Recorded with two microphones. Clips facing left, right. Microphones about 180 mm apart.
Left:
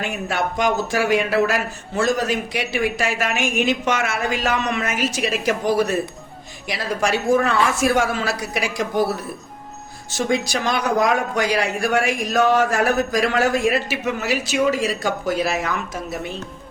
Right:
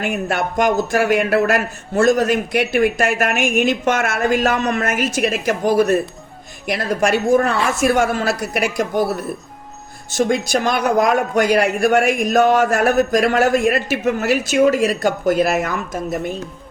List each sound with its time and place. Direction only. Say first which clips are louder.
0.0 s a man's voice: right 3 dB; 55° right (ahead or behind)
10.5 s speech: right 4 dB; 50° right (ahead or behind)